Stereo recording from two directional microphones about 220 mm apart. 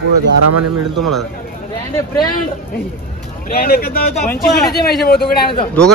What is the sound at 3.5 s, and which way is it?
Speech, 45° left (ahead or behind).